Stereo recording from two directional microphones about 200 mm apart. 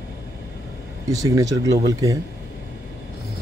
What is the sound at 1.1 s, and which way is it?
Speech, 15° right (ahead or behind).